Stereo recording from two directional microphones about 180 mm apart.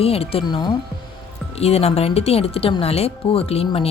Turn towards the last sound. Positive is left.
turn(degrees=35)  # may be behind; listen again after turning